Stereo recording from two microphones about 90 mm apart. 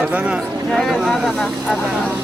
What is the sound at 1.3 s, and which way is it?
Speech, 10° left (ahead or behind).